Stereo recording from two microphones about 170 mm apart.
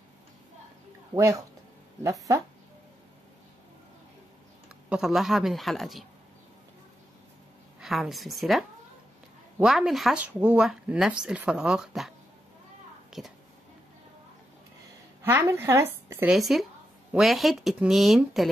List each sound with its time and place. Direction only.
1.1 s speech: 20° right (ahead or behind)
4.6 s speech: 5° right (ahead or behind)
7.8 s speech: centre (ahead or behind)
13.1 s speech: centre (ahead or behind)
15.2 s a woman's voice: 15° right (ahead or behind)
16.3 s speech: centre (ahead or behind)